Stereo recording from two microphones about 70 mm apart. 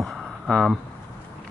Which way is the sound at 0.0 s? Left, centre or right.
Centre.